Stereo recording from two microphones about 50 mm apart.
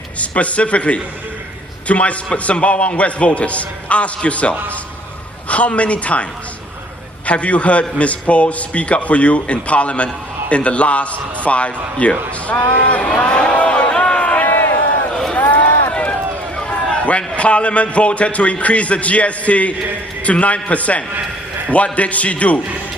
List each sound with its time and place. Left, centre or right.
0.2 s a man's voice: left
7.3 s a man's voice: left
13.1 s a sound: left
14.4 s a sound: left
15.1 s run: centre
15.9 s run: left
16.6 s a man's voice: left